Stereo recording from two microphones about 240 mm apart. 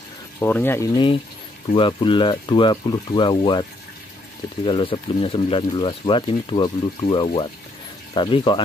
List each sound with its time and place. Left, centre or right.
0.4 s speech: centre
1.7 s speech: left
4.6 s speech: left